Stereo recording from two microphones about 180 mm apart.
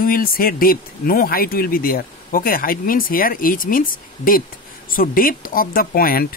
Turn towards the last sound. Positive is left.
turn(degrees=55)  # may be behind; listen again after turning